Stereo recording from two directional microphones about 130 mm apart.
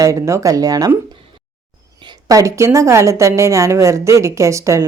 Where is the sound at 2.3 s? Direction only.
25° right (ahead or behind).